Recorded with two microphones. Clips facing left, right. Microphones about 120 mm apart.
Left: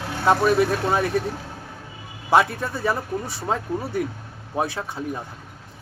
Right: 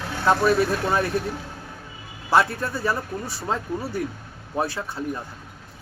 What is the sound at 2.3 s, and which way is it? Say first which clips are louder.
A man's voice: left 1 dB; 20° left (ahead or behind).